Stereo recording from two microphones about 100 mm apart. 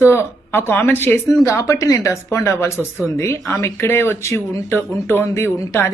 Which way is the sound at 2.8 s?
15° right (ahead or behind).